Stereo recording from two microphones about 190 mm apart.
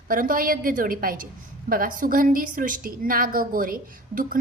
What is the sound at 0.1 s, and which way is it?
A woman's voice, 45° right (ahead or behind).